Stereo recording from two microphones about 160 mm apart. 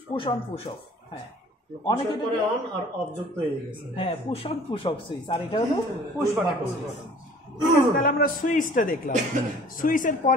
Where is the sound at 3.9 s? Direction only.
35° left (ahead or behind).